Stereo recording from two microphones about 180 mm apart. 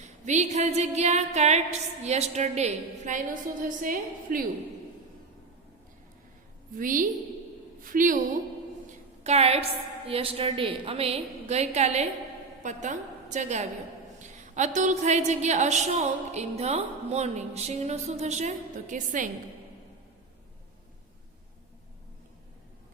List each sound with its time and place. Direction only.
0.3 s a woman's voice: 40° right (ahead or behind)
6.7 s a woman's voice: 50° right (ahead or behind)
9.2 s a woman's voice: 35° right (ahead or behind)